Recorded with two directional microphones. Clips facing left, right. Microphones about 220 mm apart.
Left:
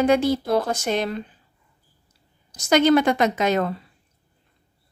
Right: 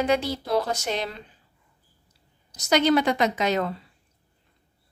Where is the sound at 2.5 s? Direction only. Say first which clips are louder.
Left 4 dB; 50° left (ahead or behind).